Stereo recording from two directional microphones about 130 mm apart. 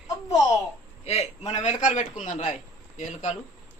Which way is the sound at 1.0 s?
55° left (ahead or behind).